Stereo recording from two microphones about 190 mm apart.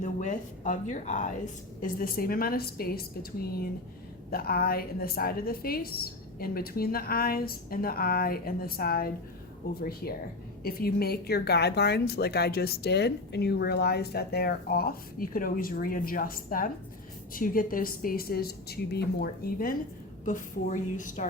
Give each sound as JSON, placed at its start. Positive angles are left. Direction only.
{"t": 0.0, "sound": "a woman's voice", "side_deg": 40}
{"t": 4.3, "sound": "a woman's voice", "side_deg": 50}